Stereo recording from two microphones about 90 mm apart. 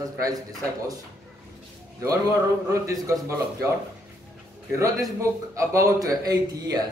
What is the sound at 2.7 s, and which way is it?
Speech, 35° right (ahead or behind).